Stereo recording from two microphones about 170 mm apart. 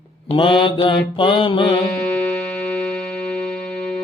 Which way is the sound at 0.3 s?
30° left (ahead or behind).